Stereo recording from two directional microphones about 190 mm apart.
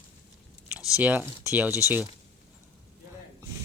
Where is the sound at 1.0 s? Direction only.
10° right (ahead or behind).